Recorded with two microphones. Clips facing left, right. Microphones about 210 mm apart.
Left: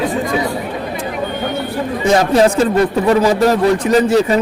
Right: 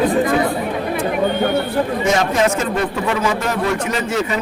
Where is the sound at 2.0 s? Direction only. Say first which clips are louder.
Left 8 dB; 35° left (ahead or behind).